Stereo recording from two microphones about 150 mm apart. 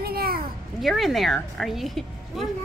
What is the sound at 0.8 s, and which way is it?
A woman's voice, centre (ahead or behind).